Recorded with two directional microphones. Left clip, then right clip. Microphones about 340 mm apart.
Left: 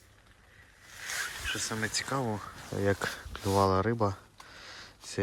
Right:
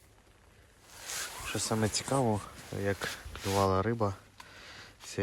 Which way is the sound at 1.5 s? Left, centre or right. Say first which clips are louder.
Right 2 dB; centre.